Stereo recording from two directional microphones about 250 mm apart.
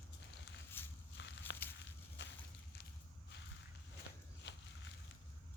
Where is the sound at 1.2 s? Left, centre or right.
Left.